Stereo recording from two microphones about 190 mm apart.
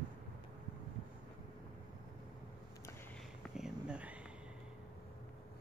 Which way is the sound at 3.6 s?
5° right (ahead or behind).